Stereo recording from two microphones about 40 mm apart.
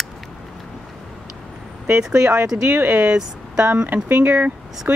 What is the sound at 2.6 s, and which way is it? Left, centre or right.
Speech, right.